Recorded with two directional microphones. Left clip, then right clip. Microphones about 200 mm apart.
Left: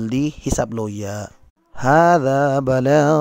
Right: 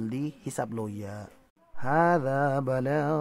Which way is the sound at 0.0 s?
35° left (ahead or behind).